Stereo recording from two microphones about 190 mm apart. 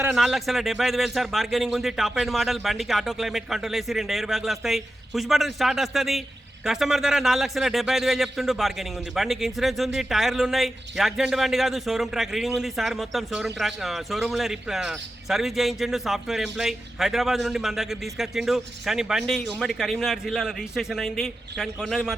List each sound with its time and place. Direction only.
0.1 s a man's voice: centre (ahead or behind)